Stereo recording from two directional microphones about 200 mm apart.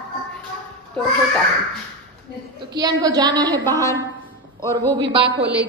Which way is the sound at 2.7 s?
20° right (ahead or behind).